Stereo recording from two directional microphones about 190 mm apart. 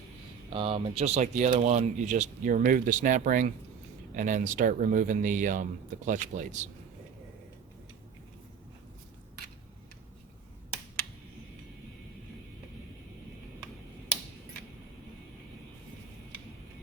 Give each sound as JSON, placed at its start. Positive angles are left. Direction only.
{"t": 0.5, "sound": "speech", "side_deg": -30}